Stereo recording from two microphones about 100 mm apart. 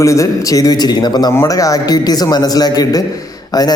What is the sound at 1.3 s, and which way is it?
A man's voice, 30° left (ahead or behind).